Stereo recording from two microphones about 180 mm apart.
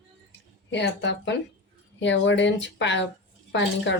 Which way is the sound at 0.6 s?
75° left (ahead or behind).